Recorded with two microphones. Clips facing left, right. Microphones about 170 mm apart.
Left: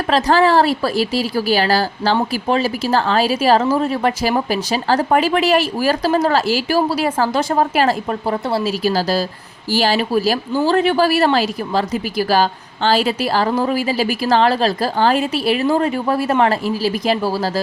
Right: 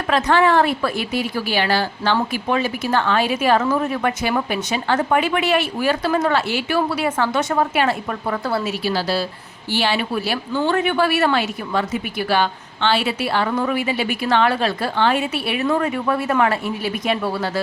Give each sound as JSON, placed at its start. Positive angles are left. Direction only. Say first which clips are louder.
{"t": 0.1, "sound": "speech", "louder": "left 2 dB", "side_deg": 35}
{"t": 8.8, "sound": "speech", "louder": "left 4 dB", "side_deg": 40}